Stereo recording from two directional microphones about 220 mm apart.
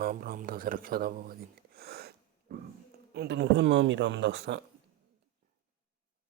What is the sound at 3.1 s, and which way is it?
Speech, 50° right (ahead or behind).